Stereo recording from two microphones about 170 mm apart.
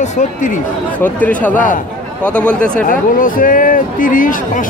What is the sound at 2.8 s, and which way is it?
Speech, 55° left (ahead or behind).